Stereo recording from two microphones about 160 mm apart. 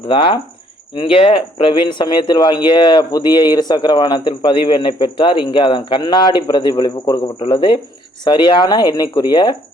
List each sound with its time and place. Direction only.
0.1 s speech: 30° left (ahead or behind)